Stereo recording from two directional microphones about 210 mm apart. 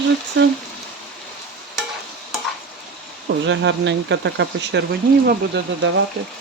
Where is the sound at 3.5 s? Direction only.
60° right (ahead or behind).